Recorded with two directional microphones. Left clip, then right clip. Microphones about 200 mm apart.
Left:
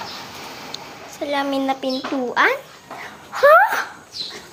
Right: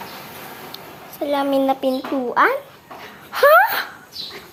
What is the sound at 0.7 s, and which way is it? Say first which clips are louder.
A child's voice: left 2 dB; 20° right (ahead or behind).